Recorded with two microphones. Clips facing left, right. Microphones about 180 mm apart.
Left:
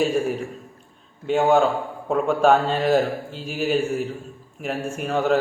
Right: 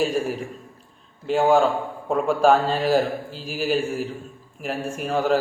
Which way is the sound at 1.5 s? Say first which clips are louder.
Even; centre (ahead or behind).